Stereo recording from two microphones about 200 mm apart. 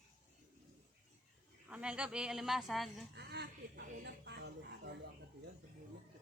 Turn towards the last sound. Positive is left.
turn(degrees=-60)  # may be behind; listen again after turning